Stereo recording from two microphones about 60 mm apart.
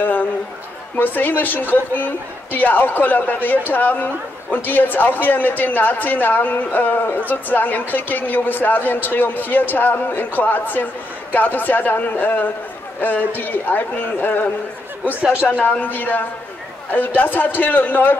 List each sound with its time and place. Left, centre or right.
0.0 s a sound: left
0.9 s speech: left
15.8 s speech: left